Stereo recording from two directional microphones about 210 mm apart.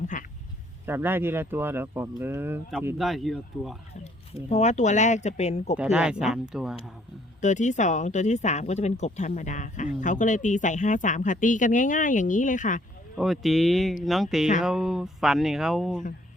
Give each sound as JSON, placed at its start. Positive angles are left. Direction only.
{"t": 0.1, "sound": "a sound", "side_deg": 35}
{"t": 0.9, "sound": "speech", "side_deg": -10}
{"t": 4.4, "sound": "speech", "side_deg": 35}
{"t": 5.7, "sound": "speech", "side_deg": -5}
{"t": 7.4, "sound": "speech", "side_deg": 35}
{"t": 13.1, "sound": "speech", "side_deg": 0}